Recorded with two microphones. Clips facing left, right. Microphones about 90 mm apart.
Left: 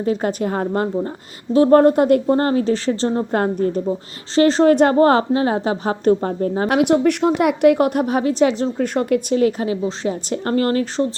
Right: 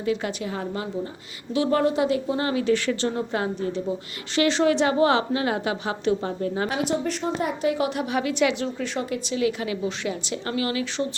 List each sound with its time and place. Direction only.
0.0 s a woman's voice: 40° left (ahead or behind)
3.3 s a woman's voice: 50° left (ahead or behind)
6.7 s a woman's voice: 60° left (ahead or behind); by 11.1 s 40° left (ahead or behind)